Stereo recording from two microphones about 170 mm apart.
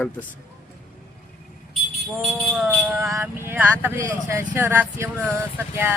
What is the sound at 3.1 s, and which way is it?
Speech, 15° right (ahead or behind).